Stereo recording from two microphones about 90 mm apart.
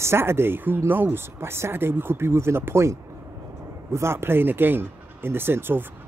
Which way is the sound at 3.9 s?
30° right (ahead or behind).